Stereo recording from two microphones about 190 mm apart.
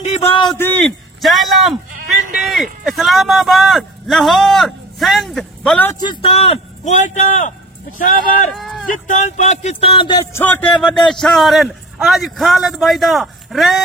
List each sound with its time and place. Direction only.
0.6 s a man's voice: 10° left (ahead or behind)
5.9 s a man's voice: 25° left (ahead or behind); by 8.5 s 45° left (ahead or behind)
8.5 s a man's voice: centre (ahead or behind)
9.0 s a man's voice: 40° left (ahead or behind)
10.3 s a man's voice: 10° left (ahead or behind)